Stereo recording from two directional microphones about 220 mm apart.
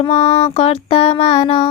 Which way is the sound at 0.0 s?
30° left (ahead or behind).